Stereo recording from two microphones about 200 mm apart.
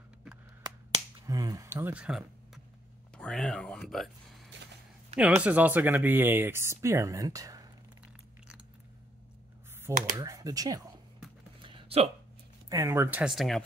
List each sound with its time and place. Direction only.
0.7 s finger snapping: 20° right (ahead or behind); by 2.6 s 5° right (ahead or behind)
3.2 s speech: 5° left (ahead or behind); by 7.7 s 20° right (ahead or behind)
10.1 s speech: 20° right (ahead or behind)
11.6 s a sound: 25° right (ahead or behind)
12.6 s speech: 15° right (ahead or behind); by 13.7 s centre (ahead or behind)